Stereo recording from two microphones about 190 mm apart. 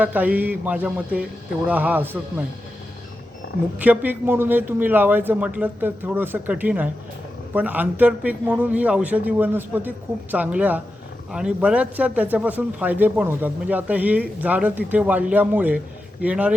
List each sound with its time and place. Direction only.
0.0 s speech: 10° right (ahead or behind)
3.4 s a sound: 55° left (ahead or behind)
3.8 s speech: 10° right (ahead or behind)